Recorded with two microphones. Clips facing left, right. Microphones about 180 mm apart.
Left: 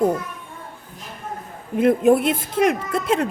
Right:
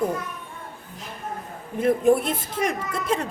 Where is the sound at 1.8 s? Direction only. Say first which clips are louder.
Left 3 dB; 65° left (ahead or behind).